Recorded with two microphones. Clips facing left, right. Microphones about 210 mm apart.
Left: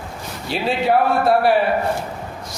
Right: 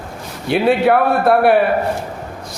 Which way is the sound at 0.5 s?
60° right (ahead or behind).